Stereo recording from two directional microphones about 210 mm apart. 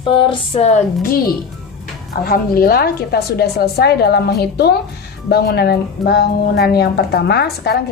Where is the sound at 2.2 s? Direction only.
45° left (ahead or behind).